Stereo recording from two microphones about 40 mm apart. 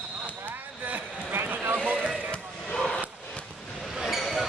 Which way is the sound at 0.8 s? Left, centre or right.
Right.